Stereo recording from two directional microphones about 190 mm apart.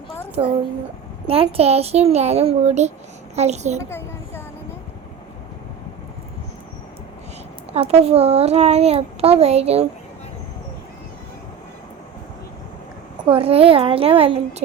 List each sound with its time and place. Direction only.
0.4 s a woman's voice: 30° right (ahead or behind)
3.8 s a sound: 10° left (ahead or behind)
7.7 s a child's voice: 30° right (ahead or behind)
13.2 s a woman's voice: 30° right (ahead or behind)